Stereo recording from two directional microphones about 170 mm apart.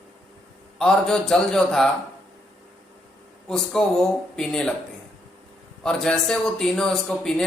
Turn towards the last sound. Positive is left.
turn(degrees=0)  # may be behind; listen again after turning